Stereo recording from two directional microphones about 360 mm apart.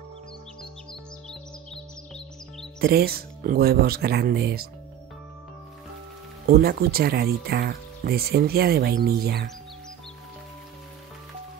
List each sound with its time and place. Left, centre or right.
1.3 s music: centre
2.8 s speech: right
6.4 s speech: right